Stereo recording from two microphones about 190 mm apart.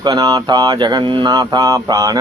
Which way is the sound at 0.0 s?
20° right (ahead or behind).